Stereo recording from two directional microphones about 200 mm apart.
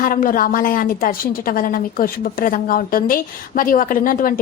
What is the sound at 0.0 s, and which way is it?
A woman's voice, 45° left (ahead or behind).